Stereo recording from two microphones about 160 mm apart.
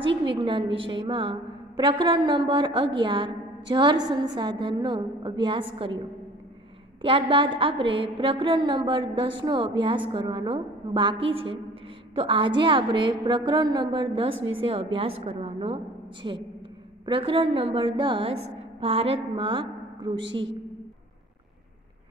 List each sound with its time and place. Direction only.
0.0 s a woman's voice: 35° right (ahead or behind)
7.0 s a woman's voice: 35° right (ahead or behind)